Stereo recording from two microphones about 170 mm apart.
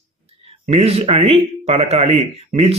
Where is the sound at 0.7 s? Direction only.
35° right (ahead or behind).